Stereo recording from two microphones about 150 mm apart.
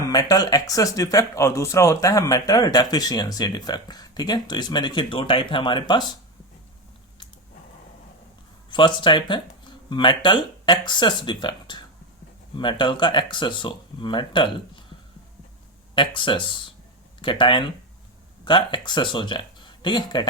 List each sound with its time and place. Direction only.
0.1 s speech: 25° left (ahead or behind)
8.7 s speech: 30° left (ahead or behind)
16.0 s speech: 35° left (ahead or behind)